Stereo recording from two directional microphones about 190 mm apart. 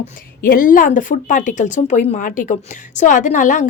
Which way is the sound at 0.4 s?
45° left (ahead or behind).